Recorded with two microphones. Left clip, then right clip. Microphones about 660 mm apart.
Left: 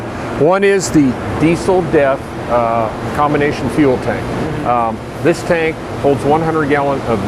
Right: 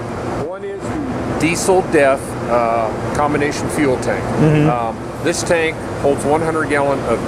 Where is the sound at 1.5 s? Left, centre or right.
Left.